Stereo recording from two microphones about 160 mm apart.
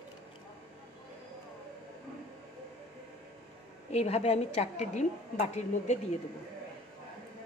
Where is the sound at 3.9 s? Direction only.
40° left (ahead or behind).